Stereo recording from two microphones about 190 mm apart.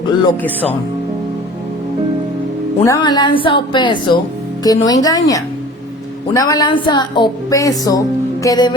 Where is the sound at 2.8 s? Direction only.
20° left (ahead or behind).